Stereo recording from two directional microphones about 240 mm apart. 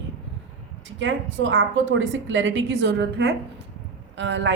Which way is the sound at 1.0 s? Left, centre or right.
Right.